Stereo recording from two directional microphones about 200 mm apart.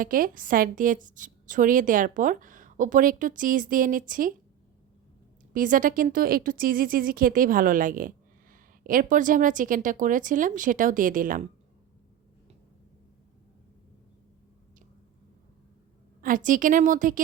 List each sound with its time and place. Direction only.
0.0 s speech: 45° right (ahead or behind)
5.5 s speech: 40° right (ahead or behind)
16.2 s speech: 40° right (ahead or behind)